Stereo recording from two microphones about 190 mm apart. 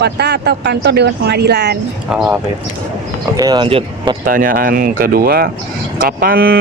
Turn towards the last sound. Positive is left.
turn(degrees=-50)  # may be behind; listen again after turning